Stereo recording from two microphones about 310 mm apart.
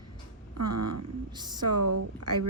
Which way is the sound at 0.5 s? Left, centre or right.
Right.